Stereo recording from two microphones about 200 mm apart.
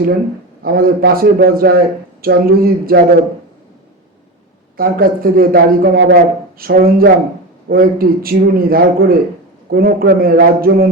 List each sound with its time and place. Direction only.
0.6 s a man's voice: 50° right (ahead or behind)
4.8 s a man's voice: 45° right (ahead or behind)